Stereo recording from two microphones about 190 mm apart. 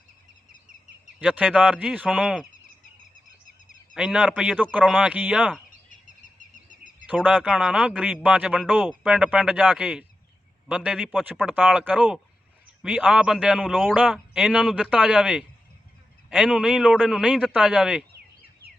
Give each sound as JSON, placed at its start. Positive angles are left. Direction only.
{"t": 1.2, "sound": "a man's voice", "side_deg": -5}
{"t": 3.9, "sound": "speech", "side_deg": -5}
{"t": 5.9, "sound": "bird", "side_deg": 45}
{"t": 7.3, "sound": "a man's voice", "side_deg": -5}